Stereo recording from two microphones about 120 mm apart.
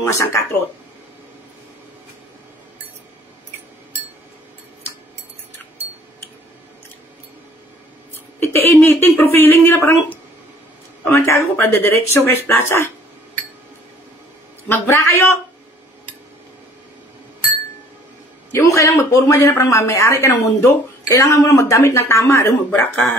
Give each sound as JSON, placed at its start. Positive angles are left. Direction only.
{"t": 0.0, "sound": "speech", "side_deg": 25}
{"t": 8.4, "sound": "speech", "side_deg": 20}
{"t": 14.7, "sound": "speech", "side_deg": 20}
{"t": 18.5, "sound": "speech", "side_deg": 25}
{"t": 22.8, "sound": "speech", "side_deg": 15}